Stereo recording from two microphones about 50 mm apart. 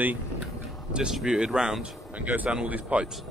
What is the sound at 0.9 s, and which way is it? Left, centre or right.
Speech, centre.